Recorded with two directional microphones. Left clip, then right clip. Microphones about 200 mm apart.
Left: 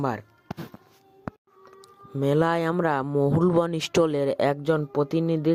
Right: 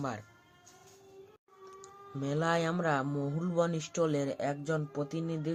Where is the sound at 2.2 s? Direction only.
50° left (ahead or behind).